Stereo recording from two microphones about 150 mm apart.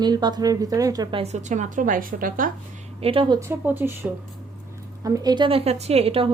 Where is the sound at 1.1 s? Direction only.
45° right (ahead or behind); by 2.5 s 65° right (ahead or behind).